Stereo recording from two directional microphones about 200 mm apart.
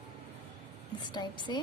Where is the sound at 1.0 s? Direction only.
20° left (ahead or behind).